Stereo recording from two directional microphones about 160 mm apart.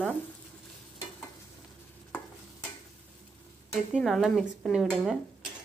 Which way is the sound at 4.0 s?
Centre (ahead or behind).